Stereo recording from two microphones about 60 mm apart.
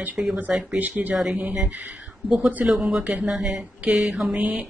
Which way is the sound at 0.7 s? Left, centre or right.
Right.